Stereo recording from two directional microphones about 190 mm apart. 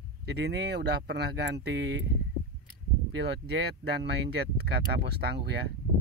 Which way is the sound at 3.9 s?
60° right (ahead or behind).